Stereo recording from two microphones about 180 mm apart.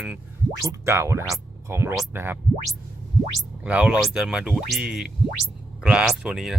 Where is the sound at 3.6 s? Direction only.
5° right (ahead or behind).